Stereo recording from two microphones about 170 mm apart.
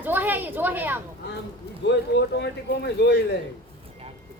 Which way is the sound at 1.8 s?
90° left.